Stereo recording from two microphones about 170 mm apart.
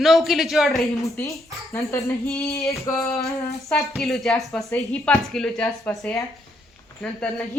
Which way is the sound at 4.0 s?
Centre (ahead or behind).